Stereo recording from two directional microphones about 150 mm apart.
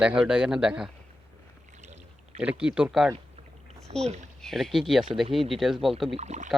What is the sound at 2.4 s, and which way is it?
Speech, 5° right (ahead or behind).